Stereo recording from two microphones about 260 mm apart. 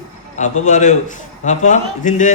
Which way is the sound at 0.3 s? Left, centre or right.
Left.